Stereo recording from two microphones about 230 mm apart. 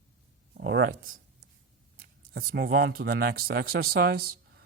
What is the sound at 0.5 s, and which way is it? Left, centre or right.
Speech, right.